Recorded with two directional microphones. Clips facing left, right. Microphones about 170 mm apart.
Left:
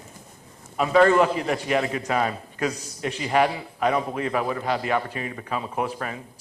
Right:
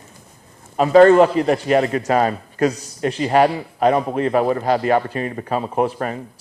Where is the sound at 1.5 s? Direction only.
50° right (ahead or behind).